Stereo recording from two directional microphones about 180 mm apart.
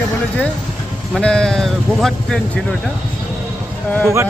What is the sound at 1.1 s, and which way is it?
Speech, 5° left (ahead or behind).